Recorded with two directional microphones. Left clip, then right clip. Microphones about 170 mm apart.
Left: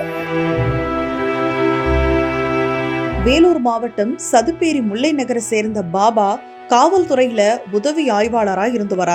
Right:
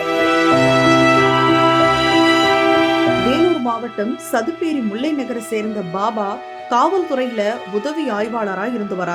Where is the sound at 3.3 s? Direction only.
15° left (ahead or behind).